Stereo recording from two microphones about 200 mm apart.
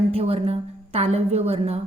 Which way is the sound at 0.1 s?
30° right (ahead or behind).